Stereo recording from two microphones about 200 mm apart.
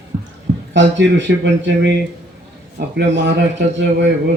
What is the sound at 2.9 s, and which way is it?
A man's voice, 60° right (ahead or behind).